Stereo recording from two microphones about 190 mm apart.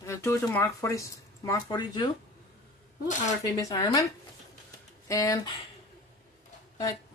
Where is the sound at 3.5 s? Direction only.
20° left (ahead or behind).